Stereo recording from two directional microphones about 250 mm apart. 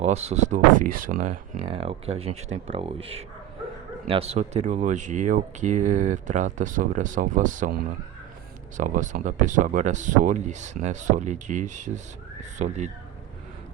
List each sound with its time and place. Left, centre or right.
0.0 s speech: right